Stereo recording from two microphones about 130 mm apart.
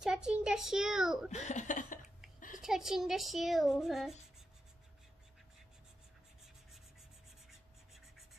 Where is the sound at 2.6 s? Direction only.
5° right (ahead or behind).